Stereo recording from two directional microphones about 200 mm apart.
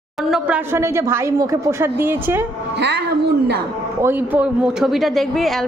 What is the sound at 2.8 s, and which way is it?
Speech, 60° right (ahead or behind).